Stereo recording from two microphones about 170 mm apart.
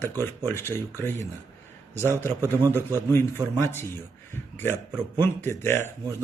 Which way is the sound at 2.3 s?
15° right (ahead or behind).